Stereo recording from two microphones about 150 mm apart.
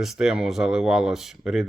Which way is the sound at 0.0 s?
5° right (ahead or behind).